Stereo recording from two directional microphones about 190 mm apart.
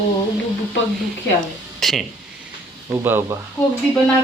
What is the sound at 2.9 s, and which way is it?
Speech, 10° right (ahead or behind).